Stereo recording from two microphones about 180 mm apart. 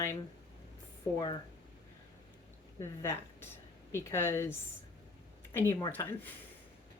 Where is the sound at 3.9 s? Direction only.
15° left (ahead or behind).